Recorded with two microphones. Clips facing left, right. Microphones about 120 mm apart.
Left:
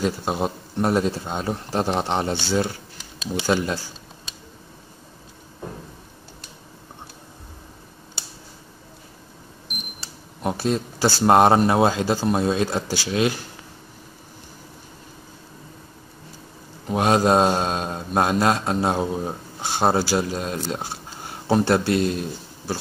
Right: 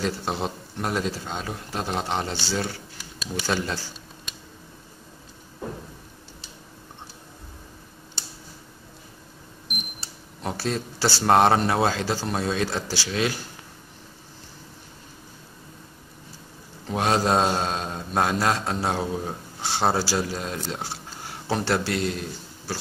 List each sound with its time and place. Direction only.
0.0 s speech: 15° left (ahead or behind)
0.8 s speech: 30° left (ahead or behind)
2.0 s speech: 20° left (ahead or behind)
10.4 s speech: 20° left (ahead or behind)
16.8 s a man's voice: 20° left (ahead or behind)